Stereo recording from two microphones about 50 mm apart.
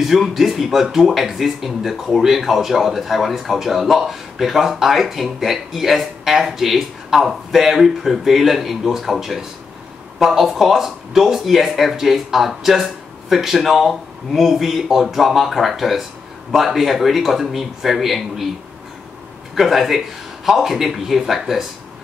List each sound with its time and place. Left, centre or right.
0.0 s speech: centre
19.5 s speech: centre